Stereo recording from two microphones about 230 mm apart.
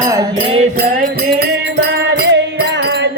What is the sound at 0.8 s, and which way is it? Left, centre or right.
Music, right.